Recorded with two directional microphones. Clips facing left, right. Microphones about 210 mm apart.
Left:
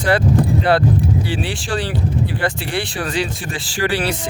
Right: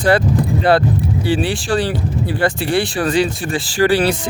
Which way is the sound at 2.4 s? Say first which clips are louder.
Right 5 dB; 40° right (ahead or behind).